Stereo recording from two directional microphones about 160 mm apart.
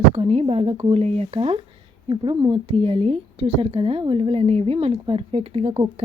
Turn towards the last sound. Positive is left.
turn(degrees=-35)  # may be behind; listen again after turning